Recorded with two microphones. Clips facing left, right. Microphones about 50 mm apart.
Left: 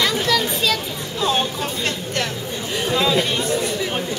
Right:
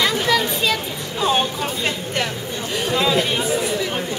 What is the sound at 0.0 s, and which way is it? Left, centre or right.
Children playing, centre.